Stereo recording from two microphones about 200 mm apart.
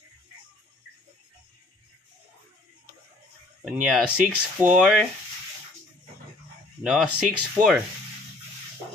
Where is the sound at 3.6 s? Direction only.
5° right (ahead or behind).